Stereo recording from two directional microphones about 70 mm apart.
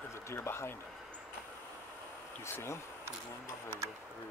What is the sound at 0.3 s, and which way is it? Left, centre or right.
Speech, left.